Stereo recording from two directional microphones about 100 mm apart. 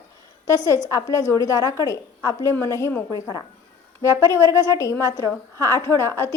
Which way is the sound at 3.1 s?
40° left (ahead or behind).